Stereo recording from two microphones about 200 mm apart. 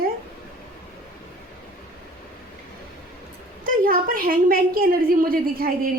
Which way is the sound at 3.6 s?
45° right (ahead or behind).